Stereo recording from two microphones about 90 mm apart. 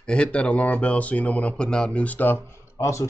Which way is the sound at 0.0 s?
10° left (ahead or behind).